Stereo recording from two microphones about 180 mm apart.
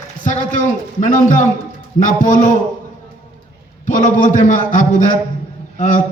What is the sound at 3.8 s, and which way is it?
A man's voice, 45° left (ahead or behind).